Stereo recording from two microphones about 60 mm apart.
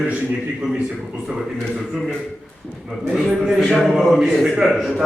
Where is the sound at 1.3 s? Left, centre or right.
Centre.